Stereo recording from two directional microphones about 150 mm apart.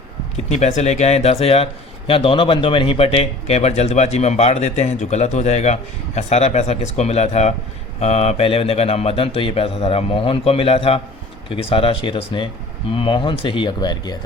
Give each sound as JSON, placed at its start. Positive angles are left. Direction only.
{"t": 0.3, "sound": "a man's voice", "side_deg": 50}